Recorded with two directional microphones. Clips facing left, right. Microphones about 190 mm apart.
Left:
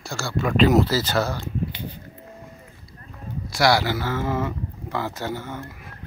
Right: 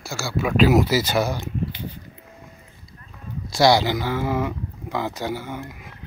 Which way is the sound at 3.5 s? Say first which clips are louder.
Right 3 dB; 20° right (ahead or behind).